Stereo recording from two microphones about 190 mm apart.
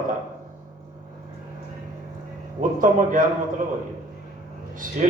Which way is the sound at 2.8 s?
45° right (ahead or behind).